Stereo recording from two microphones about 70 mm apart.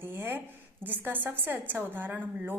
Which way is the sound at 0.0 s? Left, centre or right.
Right.